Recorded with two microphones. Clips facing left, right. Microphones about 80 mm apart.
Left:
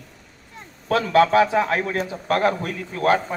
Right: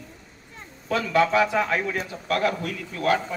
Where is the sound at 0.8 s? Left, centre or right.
Left.